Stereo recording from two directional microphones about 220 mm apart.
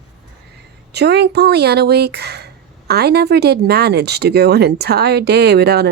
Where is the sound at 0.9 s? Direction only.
50° right (ahead or behind).